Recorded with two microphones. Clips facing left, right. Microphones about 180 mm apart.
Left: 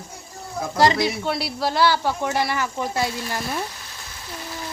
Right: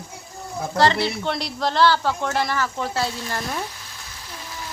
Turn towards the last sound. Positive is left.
turn(degrees=10)  # may be behind; listen again after turning